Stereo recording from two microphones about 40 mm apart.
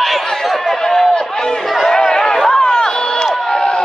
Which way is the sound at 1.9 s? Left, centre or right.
Centre.